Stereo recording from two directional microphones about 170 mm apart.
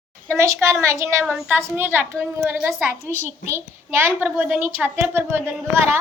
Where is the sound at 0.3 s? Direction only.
15° right (ahead or behind).